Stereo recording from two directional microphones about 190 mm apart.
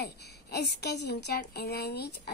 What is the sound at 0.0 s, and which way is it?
Speech, 60° left (ahead or behind).